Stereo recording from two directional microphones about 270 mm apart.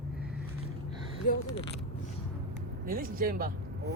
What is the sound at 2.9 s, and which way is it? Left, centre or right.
Speech, right.